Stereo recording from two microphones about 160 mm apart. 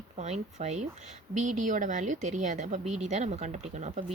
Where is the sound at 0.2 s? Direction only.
45° right (ahead or behind).